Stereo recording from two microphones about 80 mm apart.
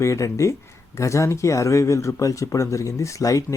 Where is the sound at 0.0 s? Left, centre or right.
Left.